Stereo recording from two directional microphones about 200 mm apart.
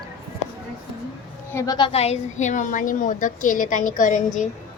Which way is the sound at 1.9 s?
30° left (ahead or behind).